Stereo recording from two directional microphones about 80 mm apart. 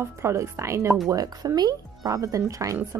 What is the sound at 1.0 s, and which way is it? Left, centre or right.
A woman's voice, right.